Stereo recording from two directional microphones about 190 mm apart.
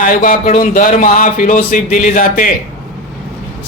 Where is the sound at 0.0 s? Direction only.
45° left (ahead or behind).